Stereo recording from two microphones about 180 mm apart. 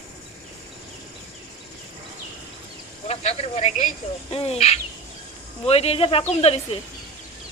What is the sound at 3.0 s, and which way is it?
Speech, 35° left (ahead or behind).